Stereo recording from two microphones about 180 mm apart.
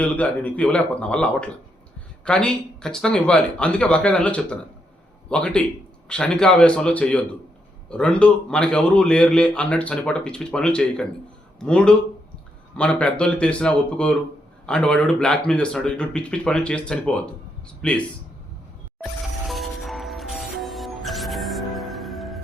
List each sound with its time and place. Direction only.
0.0 s a man's voice: 10° left (ahead or behind)
19.5 s music: centre (ahead or behind)